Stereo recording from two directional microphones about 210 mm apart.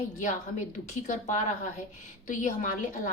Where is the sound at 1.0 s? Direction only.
35° left (ahead or behind).